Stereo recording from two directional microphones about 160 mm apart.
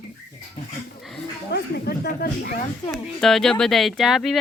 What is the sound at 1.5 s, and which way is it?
Speech, 90° left.